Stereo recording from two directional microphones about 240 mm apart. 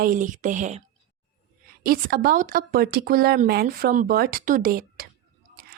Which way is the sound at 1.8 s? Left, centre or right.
Right.